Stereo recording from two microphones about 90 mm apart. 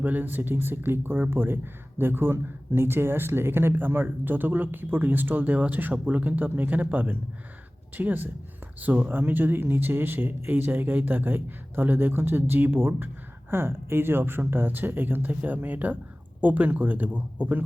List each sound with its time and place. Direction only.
0.0 s speech: 20° right (ahead or behind)